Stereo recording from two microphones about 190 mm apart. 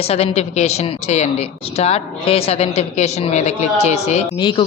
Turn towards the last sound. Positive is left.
turn(degrees=25)  # may be behind; listen again after turning